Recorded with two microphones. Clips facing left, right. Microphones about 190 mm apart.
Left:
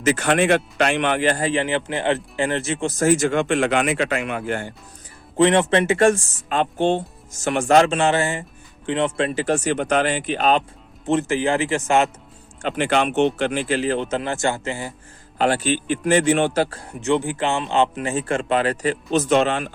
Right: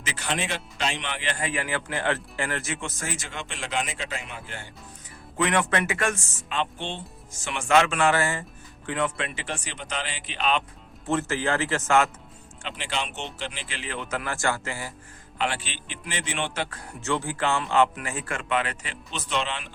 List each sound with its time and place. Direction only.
0.0 s speech: 50° left (ahead or behind)
5.4 s speech: 30° left (ahead or behind)
6.5 s speech: 45° left (ahead or behind)
11.0 s speech: 20° left (ahead or behind)
12.6 s a man's voice: 55° left (ahead or behind); by 14.9 s 20° left (ahead or behind)
15.4 s a man's voice: 40° left (ahead or behind)